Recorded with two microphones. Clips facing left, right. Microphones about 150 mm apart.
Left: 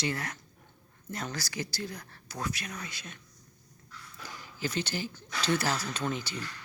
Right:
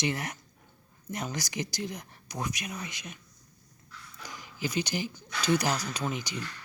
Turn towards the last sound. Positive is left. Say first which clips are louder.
# even
turn(degrees=-15)  # may be behind; listen again after turning